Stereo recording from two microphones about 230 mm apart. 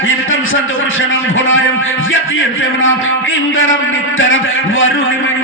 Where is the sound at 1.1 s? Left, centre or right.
Left.